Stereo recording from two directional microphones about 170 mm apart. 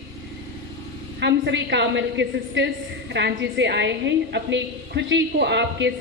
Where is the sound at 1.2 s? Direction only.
90° right.